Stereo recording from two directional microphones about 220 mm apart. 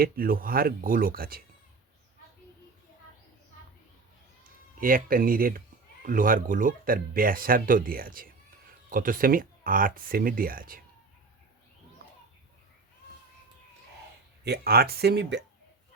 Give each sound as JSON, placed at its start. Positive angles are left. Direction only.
{"t": 0.0, "sound": "speech", "side_deg": -40}
{"t": 4.8, "sound": "speech", "side_deg": -40}
{"t": 14.4, "sound": "speech", "side_deg": -45}